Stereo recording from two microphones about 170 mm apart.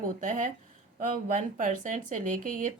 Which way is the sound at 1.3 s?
50° right (ahead or behind).